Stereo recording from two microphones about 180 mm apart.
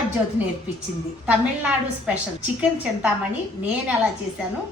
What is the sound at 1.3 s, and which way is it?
Speech, 5° right (ahead or behind).